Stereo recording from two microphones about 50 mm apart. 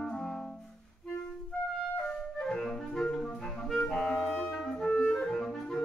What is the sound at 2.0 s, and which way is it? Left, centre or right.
Clarinet, centre.